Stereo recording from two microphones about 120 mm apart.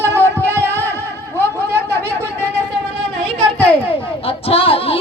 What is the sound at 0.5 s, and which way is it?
Music, 25° right (ahead or behind).